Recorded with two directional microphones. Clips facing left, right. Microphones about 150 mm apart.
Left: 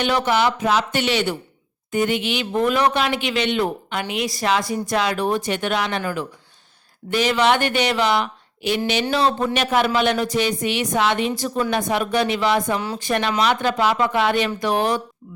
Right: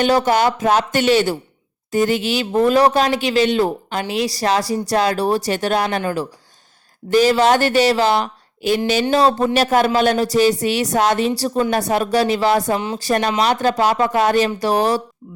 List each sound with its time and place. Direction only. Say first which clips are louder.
0.0 s speech: right 4 dB; 40° right (ahead or behind)
7.1 s speech: right 5 dB; 40° right (ahead or behind)